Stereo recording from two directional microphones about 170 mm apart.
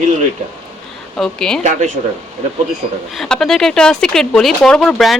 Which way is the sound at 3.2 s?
5° left (ahead or behind).